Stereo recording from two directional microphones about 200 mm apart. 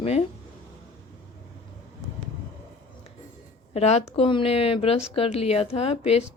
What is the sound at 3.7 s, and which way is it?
Speech, 30° left (ahead or behind).